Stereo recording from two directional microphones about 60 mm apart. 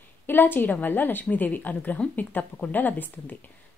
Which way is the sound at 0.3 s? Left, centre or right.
Left.